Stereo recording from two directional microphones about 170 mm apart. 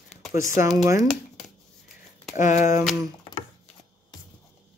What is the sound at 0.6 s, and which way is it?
Speech, 20° right (ahead or behind).